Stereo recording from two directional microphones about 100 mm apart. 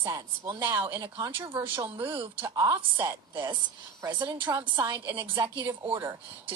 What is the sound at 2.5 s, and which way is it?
Speech, 40° right (ahead or behind).